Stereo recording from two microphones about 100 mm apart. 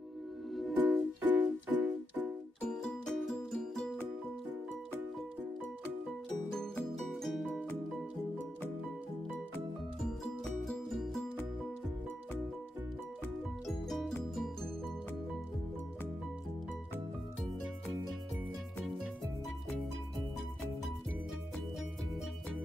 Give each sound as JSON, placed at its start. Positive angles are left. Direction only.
{"t": 0.7, "sound": "music", "side_deg": -15}
{"t": 2.6, "sound": "music", "side_deg": 5}
{"t": 6.5, "sound": "music", "side_deg": 5}
{"t": 10.4, "sound": "music", "side_deg": 0}
{"t": 13.7, "sound": "music", "side_deg": 5}